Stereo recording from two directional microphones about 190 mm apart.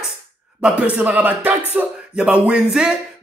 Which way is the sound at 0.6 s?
5° right (ahead or behind).